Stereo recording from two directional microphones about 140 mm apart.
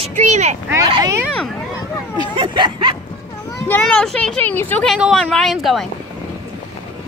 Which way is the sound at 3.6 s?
10° left (ahead or behind).